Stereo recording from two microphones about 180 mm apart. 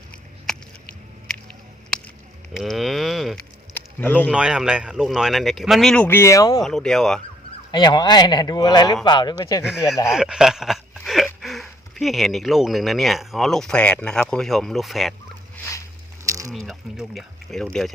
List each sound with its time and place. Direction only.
0.1 s a sound: 5° left (ahead or behind)
2.5 s cattle: centre (ahead or behind)
3.8 s a sound: 10° left (ahead or behind)
4.3 s speech: 5° right (ahead or behind); by 6.6 s 20° left (ahead or behind)
6.6 s speech: centre (ahead or behind)
7.7 s speech: 25° left (ahead or behind)
9.6 s speech: 5° right (ahead or behind)
16.2 s a sound: 15° right (ahead or behind)
16.5 s speech: centre (ahead or behind)